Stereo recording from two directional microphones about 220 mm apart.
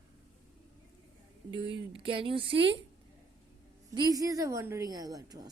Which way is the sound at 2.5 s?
55° right (ahead or behind).